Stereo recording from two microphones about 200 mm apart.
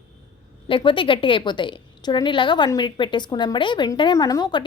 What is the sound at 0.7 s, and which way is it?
A woman's voice, 25° left (ahead or behind).